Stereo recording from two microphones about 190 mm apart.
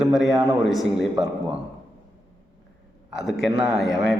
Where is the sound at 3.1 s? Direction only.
5° right (ahead or behind).